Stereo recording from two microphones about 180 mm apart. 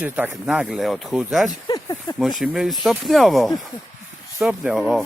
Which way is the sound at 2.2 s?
Centre (ahead or behind).